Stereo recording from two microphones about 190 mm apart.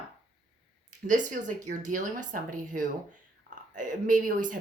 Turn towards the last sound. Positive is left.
turn(degrees=-45)  # may be behind; listen again after turning